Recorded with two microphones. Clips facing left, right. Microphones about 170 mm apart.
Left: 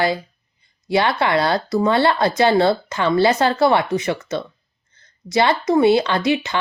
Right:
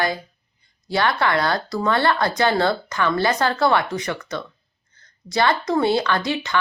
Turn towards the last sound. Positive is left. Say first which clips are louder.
# left 3 dB
turn(degrees=20)  # may be behind; listen again after turning